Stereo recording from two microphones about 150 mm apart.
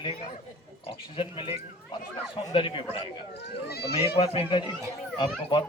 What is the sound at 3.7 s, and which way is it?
Speech, 90° left.